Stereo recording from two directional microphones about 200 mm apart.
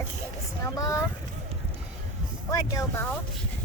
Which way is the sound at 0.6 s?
15° left (ahead or behind).